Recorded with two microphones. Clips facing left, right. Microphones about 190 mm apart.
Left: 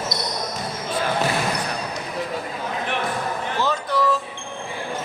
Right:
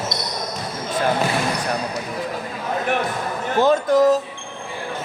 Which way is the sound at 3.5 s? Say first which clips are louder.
Right 9 dB; 50° right (ahead or behind).